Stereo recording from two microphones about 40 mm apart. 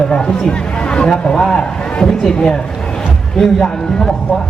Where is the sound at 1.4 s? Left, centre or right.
Centre.